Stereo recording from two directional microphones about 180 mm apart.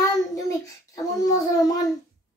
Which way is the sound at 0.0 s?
20° left (ahead or behind).